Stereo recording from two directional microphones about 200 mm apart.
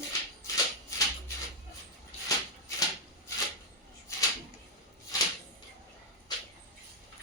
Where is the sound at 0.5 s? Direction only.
15° left (ahead or behind).